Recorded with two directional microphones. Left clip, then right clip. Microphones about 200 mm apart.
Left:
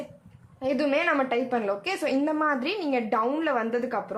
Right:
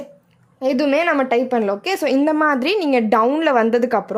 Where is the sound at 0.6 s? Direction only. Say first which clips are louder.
Right 7 dB; 40° right (ahead or behind).